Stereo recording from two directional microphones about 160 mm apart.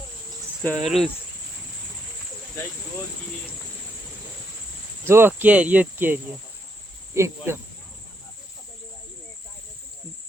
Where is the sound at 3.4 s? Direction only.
5° right (ahead or behind).